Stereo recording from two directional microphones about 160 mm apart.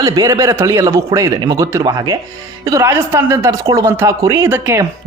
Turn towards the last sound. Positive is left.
turn(degrees=-15)  # may be behind; listen again after turning